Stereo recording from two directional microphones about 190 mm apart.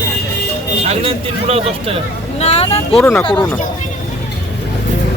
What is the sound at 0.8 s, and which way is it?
Speech, 30° right (ahead or behind).